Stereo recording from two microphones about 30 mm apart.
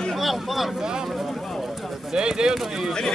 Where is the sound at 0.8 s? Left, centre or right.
Right.